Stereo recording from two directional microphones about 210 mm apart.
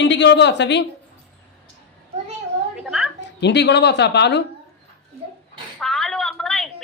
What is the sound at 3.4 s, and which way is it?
A woman's voice, 55° left (ahead or behind).